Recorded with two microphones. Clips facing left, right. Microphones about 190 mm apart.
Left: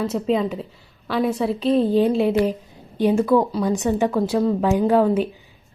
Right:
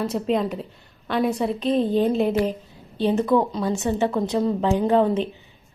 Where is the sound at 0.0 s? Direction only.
Centre (ahead or behind).